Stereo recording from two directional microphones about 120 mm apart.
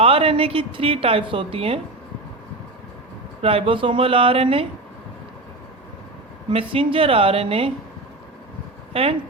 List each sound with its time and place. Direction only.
0.0 s a woman's voice: 50° right (ahead or behind)
3.4 s a woman's voice: 50° right (ahead or behind)
6.5 s a woman's voice: 50° right (ahead or behind)
8.9 s speech: 55° right (ahead or behind)